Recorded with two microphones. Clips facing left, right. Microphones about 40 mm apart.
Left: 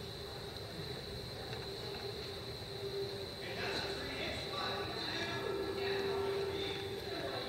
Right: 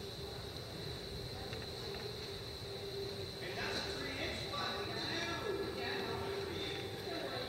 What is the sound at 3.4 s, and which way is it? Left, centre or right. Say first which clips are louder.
Clip-clop: left 1 dB; centre.